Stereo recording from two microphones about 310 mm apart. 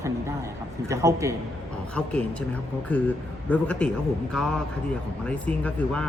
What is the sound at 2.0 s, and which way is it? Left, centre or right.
Speech, centre.